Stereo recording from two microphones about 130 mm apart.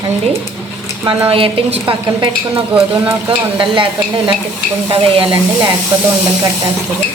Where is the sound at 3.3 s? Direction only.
40° right (ahead or behind).